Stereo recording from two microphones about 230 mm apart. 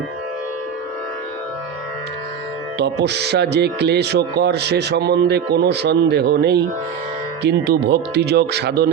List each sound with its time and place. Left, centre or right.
2.7 s speech: right